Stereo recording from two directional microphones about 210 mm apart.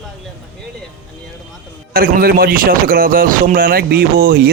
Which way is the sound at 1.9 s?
45° right (ahead or behind).